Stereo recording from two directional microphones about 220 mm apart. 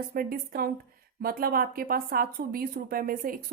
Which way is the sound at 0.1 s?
45° right (ahead or behind).